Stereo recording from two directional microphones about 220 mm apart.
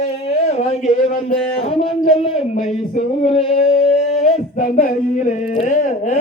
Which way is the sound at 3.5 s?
30° left (ahead or behind).